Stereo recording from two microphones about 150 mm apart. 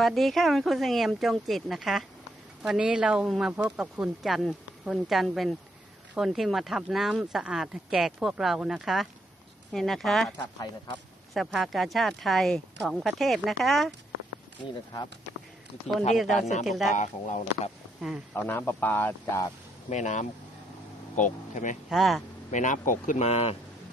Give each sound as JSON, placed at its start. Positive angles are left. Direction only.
{"t": 0.0, "sound": "speech", "side_deg": 0}
{"t": 10.4, "sound": "speech", "side_deg": 30}
{"t": 11.3, "sound": "speech", "side_deg": 0}
{"t": 16.3, "sound": "speech", "side_deg": 50}
{"t": 16.6, "sound": "speech", "side_deg": 0}
{"t": 16.9, "sound": "speech", "side_deg": 55}
{"t": 18.3, "sound": "speech", "side_deg": 15}
{"t": 19.9, "sound": "speech", "side_deg": 50}
{"t": 21.8, "sound": "speech", "side_deg": 0}
{"t": 22.5, "sound": "speech", "side_deg": 55}
{"t": 23.2, "sound": "speech", "side_deg": 45}